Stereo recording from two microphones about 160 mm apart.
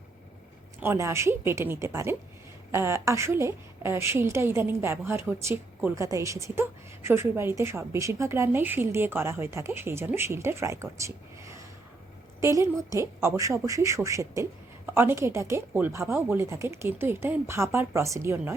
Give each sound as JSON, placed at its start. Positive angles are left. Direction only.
{"t": 0.8, "sound": "a woman's voice", "side_deg": -15}